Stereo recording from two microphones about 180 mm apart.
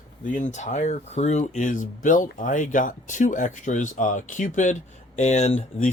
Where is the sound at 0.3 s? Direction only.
45° left (ahead or behind).